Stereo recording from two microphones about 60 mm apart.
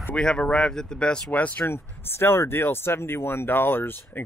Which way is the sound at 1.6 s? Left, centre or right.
Left.